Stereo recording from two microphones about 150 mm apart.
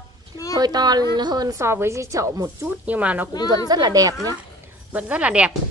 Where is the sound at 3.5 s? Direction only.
30° right (ahead or behind).